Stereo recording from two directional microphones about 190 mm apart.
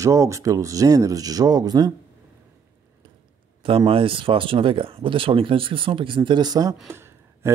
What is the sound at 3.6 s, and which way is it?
Speech, 30° right (ahead or behind).